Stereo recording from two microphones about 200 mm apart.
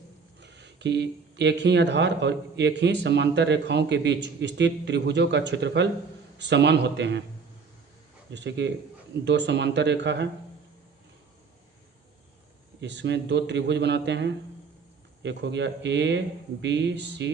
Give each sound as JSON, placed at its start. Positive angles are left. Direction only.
{"t": 0.3, "sound": "speech", "side_deg": -60}
{"t": 8.3, "sound": "speech", "side_deg": -60}
{"t": 12.8, "sound": "speech", "side_deg": -60}